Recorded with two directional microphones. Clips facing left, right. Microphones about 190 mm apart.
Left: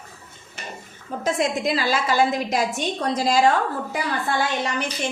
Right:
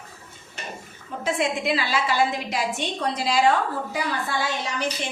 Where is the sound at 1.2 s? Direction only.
40° left (ahead or behind).